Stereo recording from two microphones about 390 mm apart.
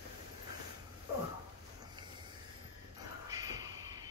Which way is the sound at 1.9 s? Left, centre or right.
Centre.